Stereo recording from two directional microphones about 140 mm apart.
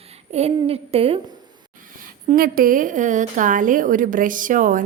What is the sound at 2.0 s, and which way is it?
A woman's voice, 90° right.